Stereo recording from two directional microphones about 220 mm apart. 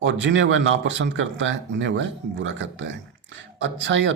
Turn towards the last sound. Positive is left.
turn(degrees=-55)  # may be behind; listen again after turning